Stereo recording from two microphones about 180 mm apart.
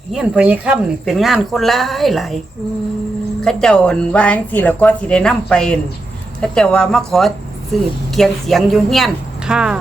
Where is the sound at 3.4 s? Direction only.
5° left (ahead or behind).